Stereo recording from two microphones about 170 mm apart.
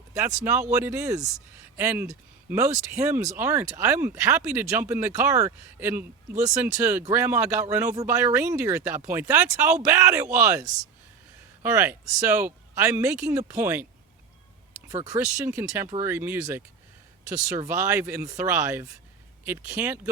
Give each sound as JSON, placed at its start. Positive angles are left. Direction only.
{"t": 0.4, "sound": "speech", "side_deg": -15}
{"t": 14.8, "sound": "speech", "side_deg": -20}